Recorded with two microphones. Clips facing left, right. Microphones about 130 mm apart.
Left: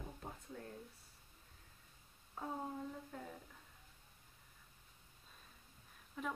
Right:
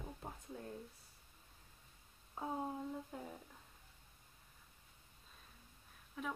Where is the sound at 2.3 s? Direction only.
15° right (ahead or behind).